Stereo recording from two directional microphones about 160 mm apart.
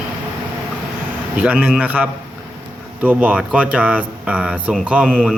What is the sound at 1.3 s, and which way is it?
Speech, 10° right (ahead or behind).